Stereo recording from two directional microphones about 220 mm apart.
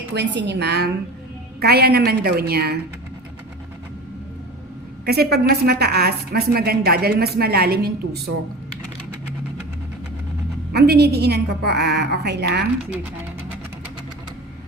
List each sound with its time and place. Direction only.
0.1 s a woman's voice: 50° right (ahead or behind)
5.0 s a woman's voice: 45° right (ahead or behind)
10.7 s a woman's voice: 45° right (ahead or behind)
12.8 s speech: 5° right (ahead or behind)